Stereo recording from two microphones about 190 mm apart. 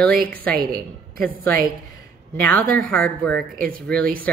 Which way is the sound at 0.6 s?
50° right (ahead or behind).